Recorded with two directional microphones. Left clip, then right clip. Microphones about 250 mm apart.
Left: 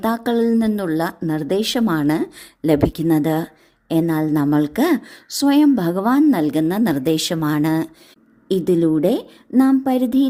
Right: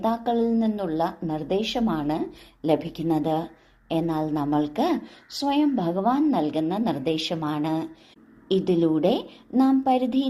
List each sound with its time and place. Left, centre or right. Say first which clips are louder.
0.0 s speech: left 5 dB; left